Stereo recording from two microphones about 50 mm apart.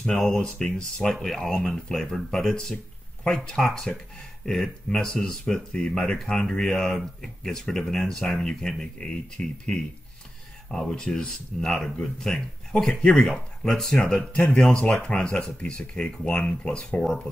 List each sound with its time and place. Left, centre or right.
0.0 s speech: centre
10.7 s speech: centre
14.3 s speech: centre